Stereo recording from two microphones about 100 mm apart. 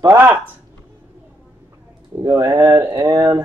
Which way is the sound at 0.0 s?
30° right (ahead or behind).